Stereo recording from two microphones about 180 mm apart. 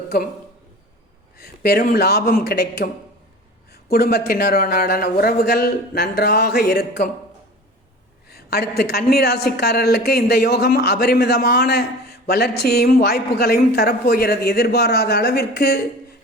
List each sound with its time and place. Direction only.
0.1 s a woman's voice: 55° left (ahead or behind)
1.4 s a woman's voice: 60° left (ahead or behind)
8.3 s a woman's voice: 60° left (ahead or behind)